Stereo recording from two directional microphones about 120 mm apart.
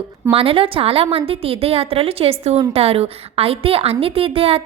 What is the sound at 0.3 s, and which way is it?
A woman's voice, 50° right (ahead or behind).